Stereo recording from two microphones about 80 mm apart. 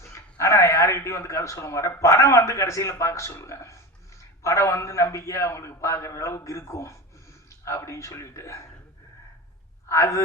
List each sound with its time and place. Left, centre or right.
0.0 s a man's voice: left
9.9 s a man's voice: left